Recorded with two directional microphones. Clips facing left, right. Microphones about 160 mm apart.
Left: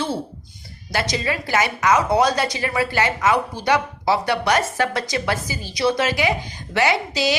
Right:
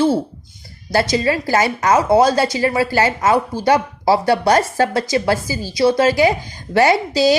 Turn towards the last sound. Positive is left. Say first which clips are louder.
# right 6 dB
turn(degrees=-40)  # may be behind; listen again after turning